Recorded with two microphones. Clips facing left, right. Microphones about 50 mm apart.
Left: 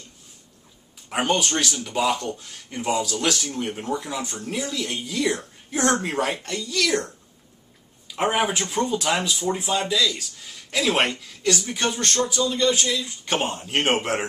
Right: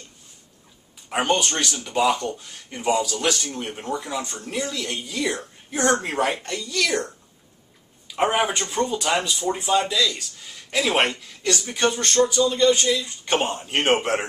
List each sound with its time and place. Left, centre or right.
1.0 s speech: centre
8.2 s speech: centre